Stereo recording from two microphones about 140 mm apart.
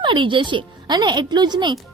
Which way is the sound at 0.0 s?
35° right (ahead or behind).